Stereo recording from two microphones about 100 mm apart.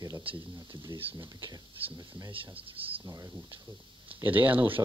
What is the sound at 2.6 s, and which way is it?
Speech, 65° right (ahead or behind).